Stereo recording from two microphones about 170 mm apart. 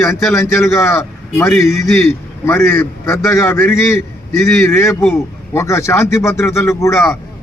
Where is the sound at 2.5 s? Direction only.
15° left (ahead or behind).